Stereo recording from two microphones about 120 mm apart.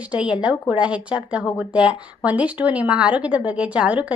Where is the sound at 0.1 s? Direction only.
10° right (ahead or behind).